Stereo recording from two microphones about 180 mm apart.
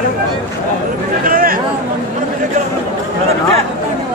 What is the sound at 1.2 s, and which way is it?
Speech, 50° right (ahead or behind).